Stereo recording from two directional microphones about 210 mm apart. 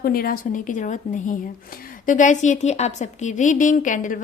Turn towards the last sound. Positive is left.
turn(degrees=35)  # may be behind; listen again after turning